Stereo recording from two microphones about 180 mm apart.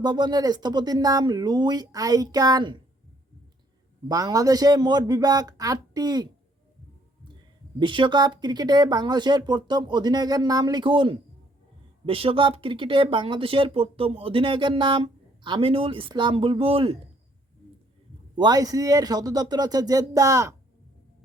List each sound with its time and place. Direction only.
0.0 s speech: 25° right (ahead or behind)
4.1 s speech: 20° right (ahead or behind)
7.8 s speech: 25° right (ahead or behind)
18.3 s speech: 20° right (ahead or behind)